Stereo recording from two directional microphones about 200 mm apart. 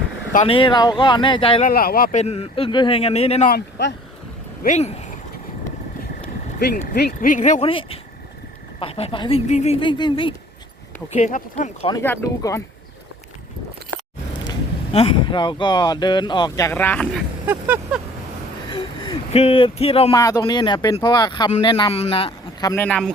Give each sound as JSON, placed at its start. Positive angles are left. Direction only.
{"t": 0.3, "sound": "speech", "side_deg": 25}
{"t": 1.6, "sound": "speech", "side_deg": 45}
{"t": 2.2, "sound": "speech", "side_deg": 30}
{"t": 3.5, "sound": "speech", "side_deg": 60}
{"t": 4.6, "sound": "speech", "side_deg": 35}
{"t": 6.6, "sound": "speech", "side_deg": 50}
{"t": 9.8, "sound": "speech", "side_deg": 25}
{"t": 11.1, "sound": "speech", "side_deg": 35}
{"t": 11.9, "sound": "speech", "side_deg": 15}
{"t": 14.9, "sound": "speech", "side_deg": 25}
{"t": 17.4, "sound": "vehicle", "side_deg": -10}
{"t": 18.7, "sound": "a sound", "side_deg": 25}
{"t": 20.1, "sound": "speech", "side_deg": 15}
{"t": 22.7, "sound": "speech", "side_deg": 10}